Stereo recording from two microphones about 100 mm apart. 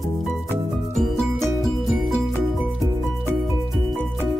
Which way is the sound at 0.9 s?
Centre (ahead or behind).